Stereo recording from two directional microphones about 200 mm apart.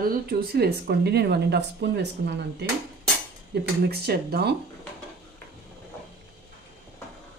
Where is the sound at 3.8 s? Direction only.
50° right (ahead or behind).